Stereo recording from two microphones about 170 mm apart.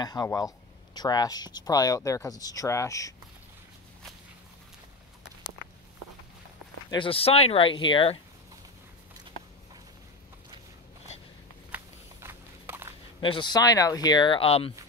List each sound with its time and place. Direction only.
0.0 s speech: 20° left (ahead or behind)
6.9 s speech: 30° left (ahead or behind)
11.7 s walk: 15° right (ahead or behind)
13.2 s speech: 30° left (ahead or behind)